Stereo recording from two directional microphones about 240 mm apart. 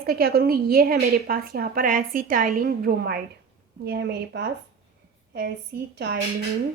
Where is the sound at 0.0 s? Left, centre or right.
Right.